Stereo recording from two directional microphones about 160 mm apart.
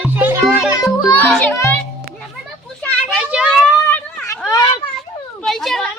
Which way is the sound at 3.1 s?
5° right (ahead or behind).